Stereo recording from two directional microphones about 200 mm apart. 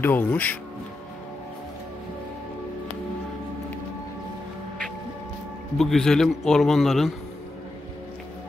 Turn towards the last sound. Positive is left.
turn(degrees=0)  # may be behind; listen again after turning